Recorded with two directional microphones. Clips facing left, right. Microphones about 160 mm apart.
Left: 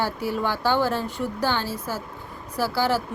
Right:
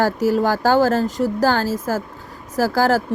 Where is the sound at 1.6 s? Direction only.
90° right.